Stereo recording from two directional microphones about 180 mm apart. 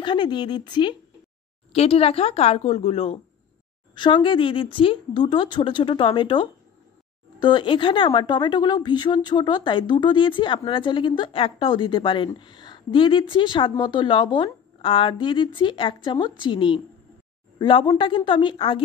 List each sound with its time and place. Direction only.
0.0 s a woman's voice: 25° left (ahead or behind)